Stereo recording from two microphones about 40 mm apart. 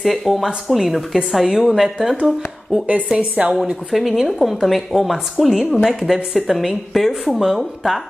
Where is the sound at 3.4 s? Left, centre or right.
Right.